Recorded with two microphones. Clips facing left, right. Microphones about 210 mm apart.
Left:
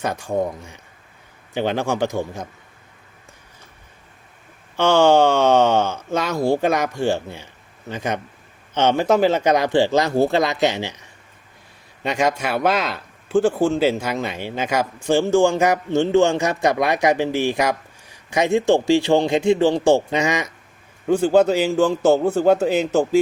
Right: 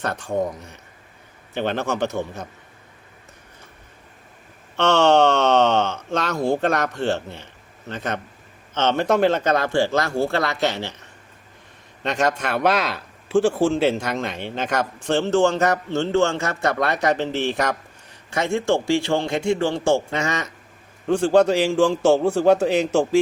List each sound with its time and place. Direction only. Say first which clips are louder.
0.0 s speech: left 1 dB; 10° left (ahead or behind)
4.8 s speech: left 2 dB; 5° left (ahead or behind)
12.0 s a man's voice: left 1 dB; 10° left (ahead or behind)